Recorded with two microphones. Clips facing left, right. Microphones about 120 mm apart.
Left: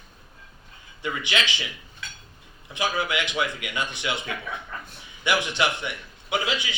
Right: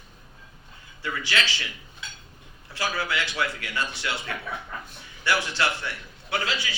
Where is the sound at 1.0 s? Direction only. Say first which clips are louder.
Left 1 dB; 20° left (ahead or behind).